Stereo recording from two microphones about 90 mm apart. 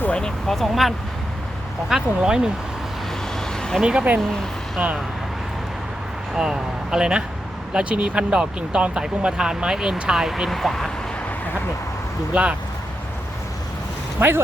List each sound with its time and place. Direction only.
0.0 s speech: 10° left (ahead or behind); by 2.5 s 5° right (ahead or behind)
3.3 s vehicle: 5° left (ahead or behind)
3.8 s speech: 10° right (ahead or behind)
6.3 s speech: 5° right (ahead or behind)
12.3 s speech: 15° right (ahead or behind)
14.2 s speech: 25° right (ahead or behind)